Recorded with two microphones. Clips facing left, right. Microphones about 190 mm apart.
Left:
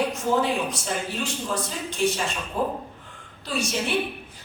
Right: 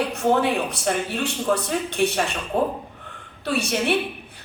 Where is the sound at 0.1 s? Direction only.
65° right (ahead or behind).